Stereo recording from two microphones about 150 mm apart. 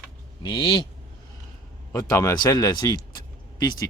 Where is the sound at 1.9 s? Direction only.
20° left (ahead or behind).